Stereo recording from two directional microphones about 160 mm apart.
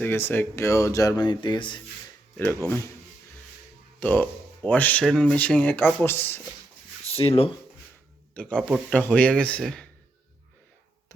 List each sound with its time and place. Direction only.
0.0 s speech: 15° left (ahead or behind); by 1.8 s 30° left (ahead or behind)
2.6 s speech: 15° left (ahead or behind)
4.0 s speech: 10° left (ahead or behind)
7.0 s speech: 40° left (ahead or behind)
8.3 s speech: 5° left (ahead or behind)